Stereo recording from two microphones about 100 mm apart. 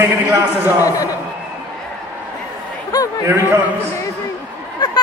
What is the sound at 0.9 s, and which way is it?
Speech, 35° left (ahead or behind).